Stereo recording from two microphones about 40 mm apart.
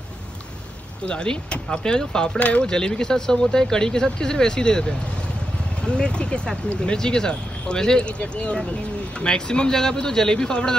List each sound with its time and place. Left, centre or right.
1.0 s speech: left
2.3 s speech: left
2.6 s speech: centre
8.1 s speech: left